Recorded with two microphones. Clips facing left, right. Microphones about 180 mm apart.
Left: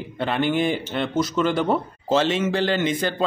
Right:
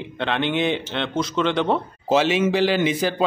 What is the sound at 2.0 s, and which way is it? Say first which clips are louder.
A man's voice: right 3 dB; 5° right (ahead or behind).